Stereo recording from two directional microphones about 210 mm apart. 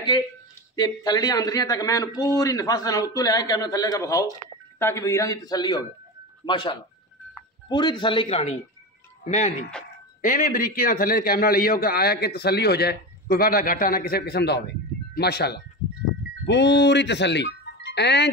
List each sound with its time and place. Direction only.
0.7 s a man's voice: 20° left (ahead or behind); by 18.3 s 55° left (ahead or behind)